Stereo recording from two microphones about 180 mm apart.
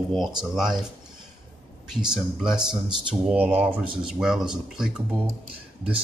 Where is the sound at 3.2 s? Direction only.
5° right (ahead or behind).